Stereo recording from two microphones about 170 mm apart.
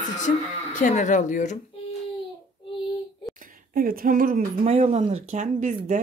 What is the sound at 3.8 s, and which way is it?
Speech, 55° right (ahead or behind).